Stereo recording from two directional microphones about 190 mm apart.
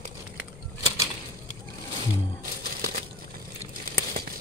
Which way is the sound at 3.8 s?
50° right (ahead or behind).